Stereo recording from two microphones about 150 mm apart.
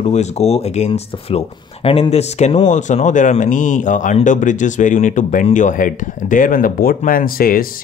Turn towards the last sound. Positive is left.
turn(degrees=75)  # may be behind; listen again after turning